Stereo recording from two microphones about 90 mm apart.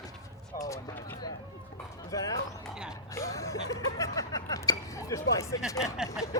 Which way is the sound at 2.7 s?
10° right (ahead or behind).